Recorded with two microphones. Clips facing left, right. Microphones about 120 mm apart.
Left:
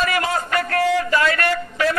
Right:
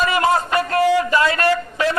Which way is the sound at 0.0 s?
25° right (ahead or behind).